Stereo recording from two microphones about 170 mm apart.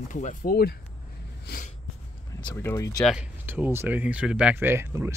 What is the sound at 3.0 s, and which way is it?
Speech, 5° right (ahead or behind).